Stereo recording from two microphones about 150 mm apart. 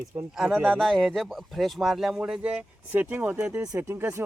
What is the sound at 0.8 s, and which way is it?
Speech, centre (ahead or behind).